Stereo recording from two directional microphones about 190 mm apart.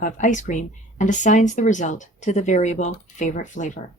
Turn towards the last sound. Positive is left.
turn(degrees=40)  # may be behind; listen again after turning